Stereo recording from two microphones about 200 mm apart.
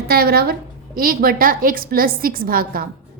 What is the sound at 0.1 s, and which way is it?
A woman's voice, 50° right (ahead or behind).